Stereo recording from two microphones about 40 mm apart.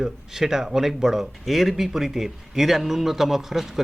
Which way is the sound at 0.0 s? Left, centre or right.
Centre.